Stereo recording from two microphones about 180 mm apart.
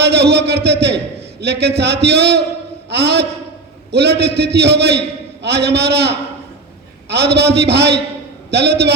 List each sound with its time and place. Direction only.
0.0 s a man's voice: 65° right (ahead or behind)